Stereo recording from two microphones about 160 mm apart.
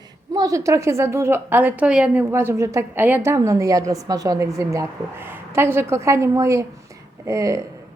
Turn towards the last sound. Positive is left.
turn(degrees=-20)  # may be behind; listen again after turning